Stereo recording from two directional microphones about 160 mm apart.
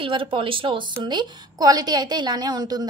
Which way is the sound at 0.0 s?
35° right (ahead or behind).